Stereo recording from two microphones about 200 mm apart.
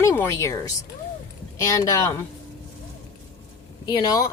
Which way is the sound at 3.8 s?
20° left (ahead or behind).